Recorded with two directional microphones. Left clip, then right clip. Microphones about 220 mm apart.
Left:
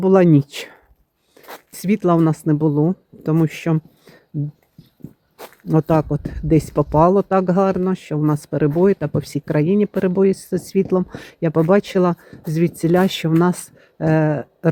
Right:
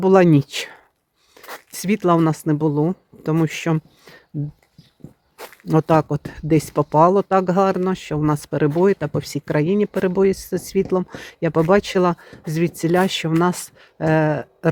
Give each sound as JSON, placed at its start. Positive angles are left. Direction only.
{"t": 0.0, "sound": "speech", "side_deg": -20}
{"t": 5.6, "sound": "speech", "side_deg": -20}